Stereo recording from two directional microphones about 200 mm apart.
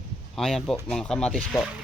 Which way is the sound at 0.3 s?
Centre (ahead or behind).